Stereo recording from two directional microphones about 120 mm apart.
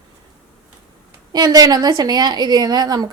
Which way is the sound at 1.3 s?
35° right (ahead or behind).